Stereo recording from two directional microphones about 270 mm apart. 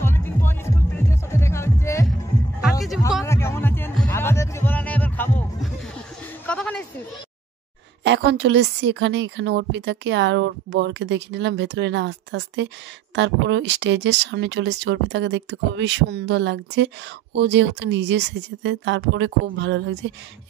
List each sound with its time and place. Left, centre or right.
0.0 s music: centre
3.3 s heart sounds: centre
6.4 s a sound: centre
8.0 s speech: right